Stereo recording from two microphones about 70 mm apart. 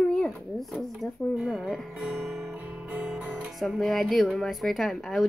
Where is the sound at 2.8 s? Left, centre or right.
Right.